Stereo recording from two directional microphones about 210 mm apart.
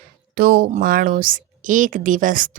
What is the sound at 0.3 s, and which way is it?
Speech, 45° right (ahead or behind).